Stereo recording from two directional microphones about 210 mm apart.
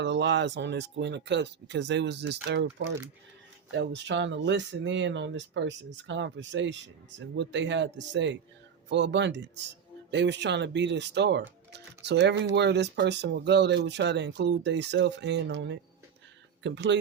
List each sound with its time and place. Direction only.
0.0 s speech: 55° right (ahead or behind)